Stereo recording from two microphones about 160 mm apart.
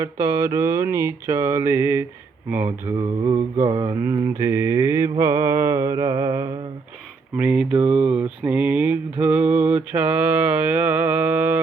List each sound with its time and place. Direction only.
0.0 s speech: 20° right (ahead or behind)
3.7 s mantra: 20° right (ahead or behind)
7.3 s speech: 5° right (ahead or behind)